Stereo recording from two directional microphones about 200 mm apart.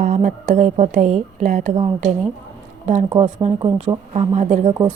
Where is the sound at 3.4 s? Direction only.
35° right (ahead or behind).